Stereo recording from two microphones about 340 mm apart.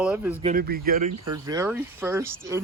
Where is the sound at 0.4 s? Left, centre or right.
Right.